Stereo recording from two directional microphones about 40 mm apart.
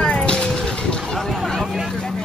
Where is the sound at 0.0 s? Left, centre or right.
Left.